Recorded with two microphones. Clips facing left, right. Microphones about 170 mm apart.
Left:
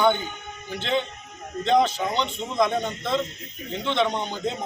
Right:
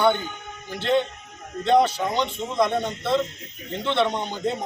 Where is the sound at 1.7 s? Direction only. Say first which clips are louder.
Right 2 dB; 10° right (ahead or behind).